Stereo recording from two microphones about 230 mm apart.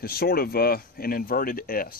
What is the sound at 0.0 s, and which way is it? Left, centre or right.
Speech, left.